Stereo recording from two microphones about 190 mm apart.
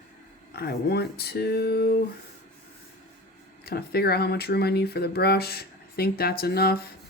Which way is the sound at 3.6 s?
55° left (ahead or behind).